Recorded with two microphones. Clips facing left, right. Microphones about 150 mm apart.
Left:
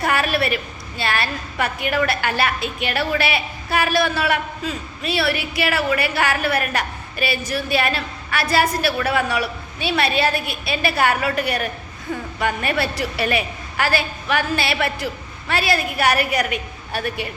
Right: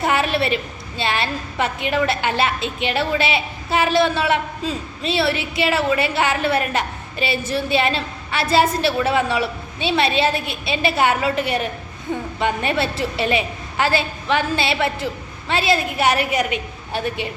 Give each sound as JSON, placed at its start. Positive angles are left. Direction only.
{"t": 0.0, "sound": "a woman's voice", "side_deg": -20}